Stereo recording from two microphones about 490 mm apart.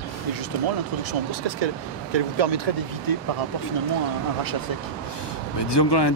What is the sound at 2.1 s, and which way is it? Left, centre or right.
Speech, right.